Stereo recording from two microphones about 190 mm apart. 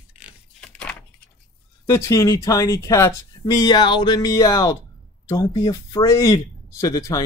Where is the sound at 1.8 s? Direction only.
15° left (ahead or behind).